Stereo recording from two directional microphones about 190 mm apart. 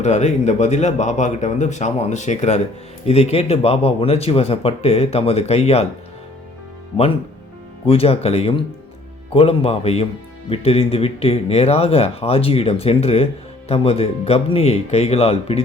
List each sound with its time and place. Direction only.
0.0 s speech: 35° left (ahead or behind)
7.9 s speech: 30° left (ahead or behind)